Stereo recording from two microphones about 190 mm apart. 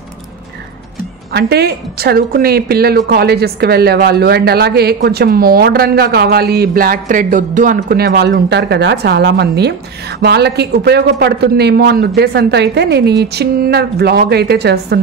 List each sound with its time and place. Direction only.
1.3 s a woman's voice: 60° right (ahead or behind)